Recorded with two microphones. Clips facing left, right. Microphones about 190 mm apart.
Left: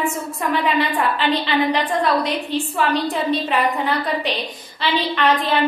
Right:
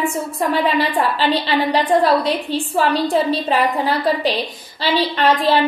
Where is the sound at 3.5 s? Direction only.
35° right (ahead or behind).